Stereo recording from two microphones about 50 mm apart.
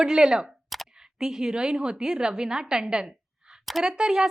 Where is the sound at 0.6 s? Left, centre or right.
Centre.